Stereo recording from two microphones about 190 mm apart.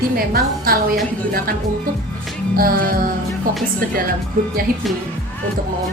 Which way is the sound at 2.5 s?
50° right (ahead or behind).